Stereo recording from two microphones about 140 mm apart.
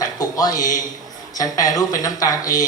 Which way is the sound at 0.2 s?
25° left (ahead or behind).